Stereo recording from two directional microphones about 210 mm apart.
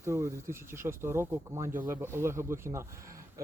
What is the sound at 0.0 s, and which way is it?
Speech, 10° right (ahead or behind).